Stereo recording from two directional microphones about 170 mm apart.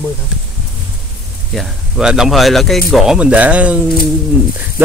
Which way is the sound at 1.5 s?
Centre (ahead or behind).